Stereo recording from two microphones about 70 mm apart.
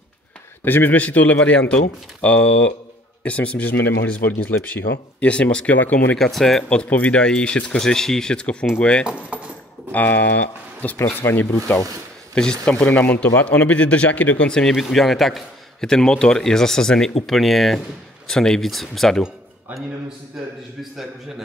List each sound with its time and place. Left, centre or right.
0.7 s speech: left
5.8 s speech: left
6.1 s speech: centre
6.7 s a man's voice: centre
9.3 s dishes: centre
9.9 s speech: left
11.0 s speech: left
12.4 s a man's voice: centre
14.5 s a man's voice: centre